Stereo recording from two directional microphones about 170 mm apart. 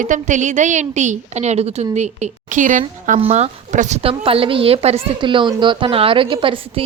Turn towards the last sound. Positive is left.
turn(degrees=-30)  # may be behind; listen again after turning